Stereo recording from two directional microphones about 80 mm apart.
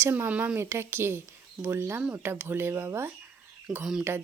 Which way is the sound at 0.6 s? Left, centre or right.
Right.